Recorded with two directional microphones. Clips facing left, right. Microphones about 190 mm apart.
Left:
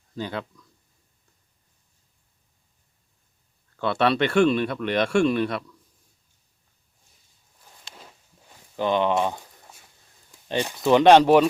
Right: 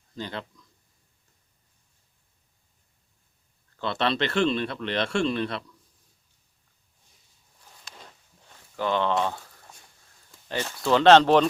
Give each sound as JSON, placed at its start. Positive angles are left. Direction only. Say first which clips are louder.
{"t": 0.2, "sound": "speech", "louder": "left 4 dB", "side_deg": 10}
{"t": 3.8, "sound": "speech", "louder": "left 5 dB", "side_deg": 10}
{"t": 7.9, "sound": "a sound", "louder": "left 1 dB", "side_deg": 5}
{"t": 8.7, "sound": "speech", "louder": "left 3 dB", "side_deg": 20}